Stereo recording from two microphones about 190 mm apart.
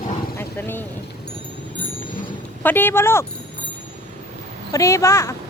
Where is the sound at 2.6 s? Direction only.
10° left (ahead or behind).